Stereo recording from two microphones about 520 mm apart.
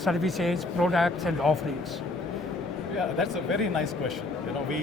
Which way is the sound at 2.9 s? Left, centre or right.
Right.